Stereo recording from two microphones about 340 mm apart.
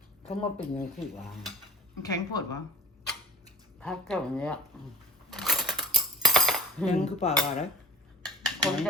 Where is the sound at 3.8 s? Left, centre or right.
Centre.